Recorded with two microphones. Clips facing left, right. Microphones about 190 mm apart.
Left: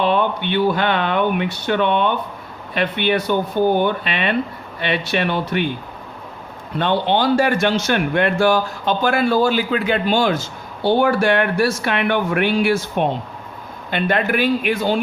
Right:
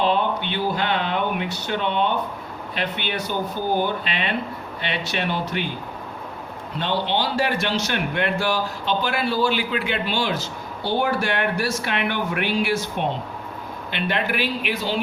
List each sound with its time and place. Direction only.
0.0 s speech: 60° left (ahead or behind)
6.7 s a man's voice: 55° left (ahead or behind)